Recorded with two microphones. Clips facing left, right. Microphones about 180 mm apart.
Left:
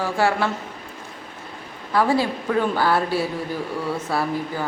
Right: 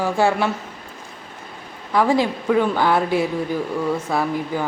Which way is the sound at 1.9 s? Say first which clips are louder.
Right 2 dB; 15° right (ahead or behind).